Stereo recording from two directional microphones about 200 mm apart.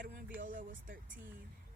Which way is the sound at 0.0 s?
45° right (ahead or behind).